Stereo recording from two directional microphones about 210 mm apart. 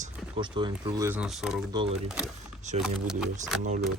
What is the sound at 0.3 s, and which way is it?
Speech, 20° right (ahead or behind).